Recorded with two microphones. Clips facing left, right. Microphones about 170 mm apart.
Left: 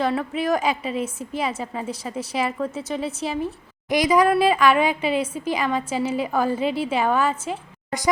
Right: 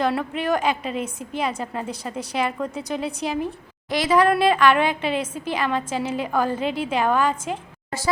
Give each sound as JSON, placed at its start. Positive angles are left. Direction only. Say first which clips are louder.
{"t": 0.0, "sound": "a woman's voice", "louder": "even", "side_deg": 0}
{"t": 3.8, "sound": "a woman's voice", "louder": "left 1 dB", "side_deg": 15}